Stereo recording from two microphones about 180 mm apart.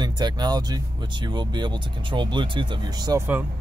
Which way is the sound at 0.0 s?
25° right (ahead or behind).